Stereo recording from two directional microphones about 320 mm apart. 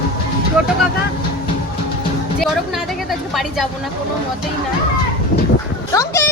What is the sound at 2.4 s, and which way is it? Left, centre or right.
A woman's voice, centre.